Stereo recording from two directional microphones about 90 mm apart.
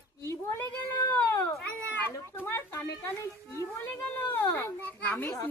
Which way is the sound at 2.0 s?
20° left (ahead or behind).